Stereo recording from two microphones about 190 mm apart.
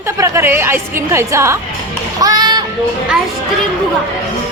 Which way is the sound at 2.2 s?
20° right (ahead or behind).